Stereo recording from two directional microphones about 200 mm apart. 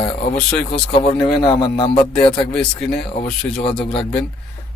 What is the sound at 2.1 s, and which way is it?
A man's voice, 5° left (ahead or behind).